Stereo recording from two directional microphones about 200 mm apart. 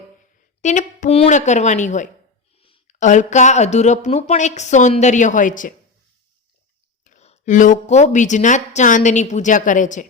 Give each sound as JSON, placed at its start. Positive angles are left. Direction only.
{"t": 0.6, "sound": "speech", "side_deg": 40}
{"t": 7.0, "sound": "speech", "side_deg": 35}